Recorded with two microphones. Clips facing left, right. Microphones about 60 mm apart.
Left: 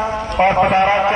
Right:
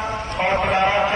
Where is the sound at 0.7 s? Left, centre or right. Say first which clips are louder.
Left 4 dB; left.